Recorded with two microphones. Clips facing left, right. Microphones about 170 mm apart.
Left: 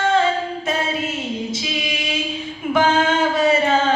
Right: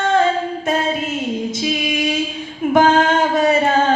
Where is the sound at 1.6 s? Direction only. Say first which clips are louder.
Right 7 dB; 50° right (ahead or behind).